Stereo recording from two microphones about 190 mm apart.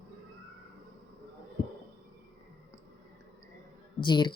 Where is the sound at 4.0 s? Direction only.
25° left (ahead or behind).